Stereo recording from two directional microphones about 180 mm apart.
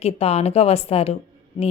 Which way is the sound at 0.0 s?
35° left (ahead or behind).